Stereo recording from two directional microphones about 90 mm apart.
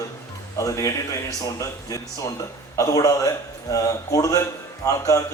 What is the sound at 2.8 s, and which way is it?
A man's voice, 40° left (ahead or behind).